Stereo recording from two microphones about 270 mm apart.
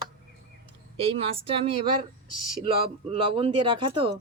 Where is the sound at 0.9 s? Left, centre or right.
Right.